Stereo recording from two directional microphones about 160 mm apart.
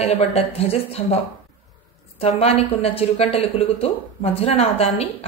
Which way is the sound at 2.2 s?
40° left (ahead or behind).